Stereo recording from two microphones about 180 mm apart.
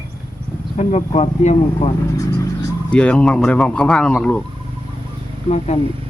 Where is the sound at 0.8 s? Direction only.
35° left (ahead or behind).